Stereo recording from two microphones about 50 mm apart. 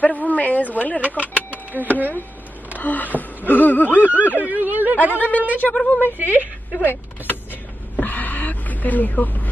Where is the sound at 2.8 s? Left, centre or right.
Left.